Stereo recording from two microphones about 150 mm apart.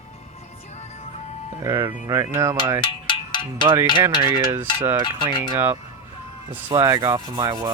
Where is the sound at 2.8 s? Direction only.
35° left (ahead or behind).